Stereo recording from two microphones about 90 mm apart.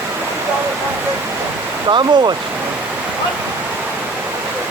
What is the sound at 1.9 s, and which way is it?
Speech, 55° right (ahead or behind).